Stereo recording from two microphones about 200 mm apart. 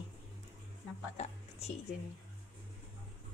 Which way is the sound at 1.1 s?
35° left (ahead or behind).